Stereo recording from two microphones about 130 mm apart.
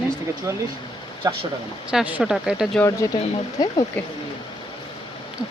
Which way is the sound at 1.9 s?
10° right (ahead or behind).